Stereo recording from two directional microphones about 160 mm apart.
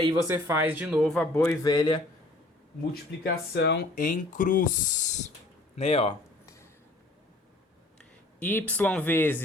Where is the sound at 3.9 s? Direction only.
55° left (ahead or behind).